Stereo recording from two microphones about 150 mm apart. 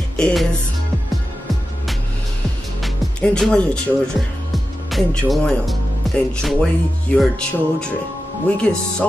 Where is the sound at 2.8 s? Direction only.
5° left (ahead or behind).